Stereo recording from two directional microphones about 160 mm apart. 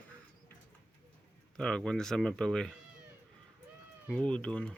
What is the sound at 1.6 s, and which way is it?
Speech, 5° left (ahead or behind).